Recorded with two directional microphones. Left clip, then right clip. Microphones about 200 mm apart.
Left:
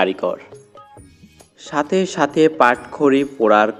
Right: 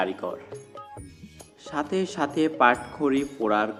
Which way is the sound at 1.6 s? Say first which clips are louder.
Left 9 dB; 30° left (ahead or behind).